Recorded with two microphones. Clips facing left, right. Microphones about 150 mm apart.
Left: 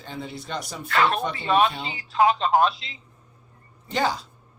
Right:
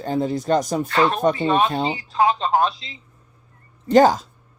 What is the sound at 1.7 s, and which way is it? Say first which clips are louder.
Speech: right 11 dB; 40° right (ahead or behind).